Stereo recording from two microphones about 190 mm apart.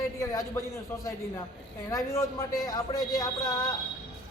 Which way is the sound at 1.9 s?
15° left (ahead or behind).